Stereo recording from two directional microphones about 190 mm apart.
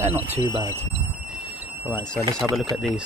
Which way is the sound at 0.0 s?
15° right (ahead or behind).